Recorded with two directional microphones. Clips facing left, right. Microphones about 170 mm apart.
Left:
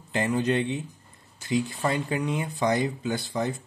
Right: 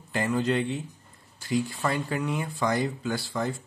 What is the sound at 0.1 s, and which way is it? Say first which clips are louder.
Speech: left 1 dB; 20° left (ahead or behind).